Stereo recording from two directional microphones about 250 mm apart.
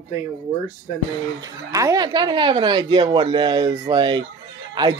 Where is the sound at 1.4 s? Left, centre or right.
Centre.